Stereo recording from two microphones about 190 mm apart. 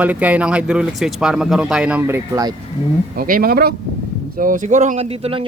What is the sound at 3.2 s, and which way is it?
Speech, 50° right (ahead or behind).